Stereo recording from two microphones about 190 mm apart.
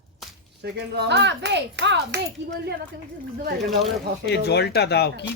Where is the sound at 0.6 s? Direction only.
60° right (ahead or behind).